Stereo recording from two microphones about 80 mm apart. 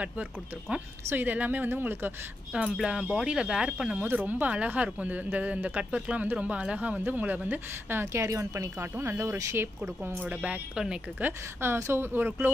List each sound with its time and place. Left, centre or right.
1.0 s speech: right
2.5 s speech: centre
4.0 s speech: right
10.4 s speech: centre
11.2 s speech: right